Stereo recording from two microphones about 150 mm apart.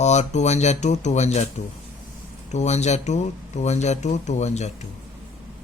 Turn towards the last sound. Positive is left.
turn(degrees=50)  # may be behind; listen again after turning